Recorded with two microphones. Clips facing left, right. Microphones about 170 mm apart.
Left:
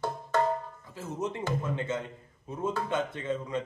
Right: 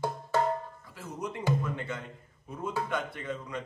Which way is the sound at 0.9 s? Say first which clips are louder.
Left 4 dB; 25° left (ahead or behind).